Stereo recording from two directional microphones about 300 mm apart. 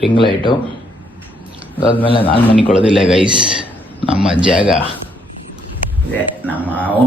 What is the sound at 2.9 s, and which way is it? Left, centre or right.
A man's voice, centre.